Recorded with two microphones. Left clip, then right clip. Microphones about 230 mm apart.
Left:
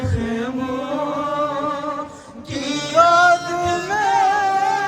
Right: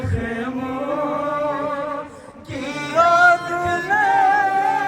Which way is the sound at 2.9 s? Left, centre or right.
Centre.